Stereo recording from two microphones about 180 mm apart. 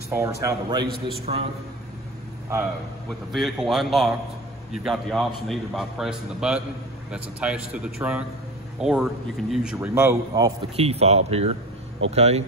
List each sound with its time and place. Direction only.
0.1 s speech: 15° right (ahead or behind)
1.2 s speech: 35° right (ahead or behind)
3.3 s a man's voice: centre (ahead or behind); by 10.5 s 15° right (ahead or behind)
10.8 s speech: 35° right (ahead or behind)